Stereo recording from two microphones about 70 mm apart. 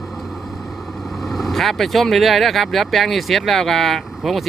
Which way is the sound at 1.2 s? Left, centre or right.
Centre.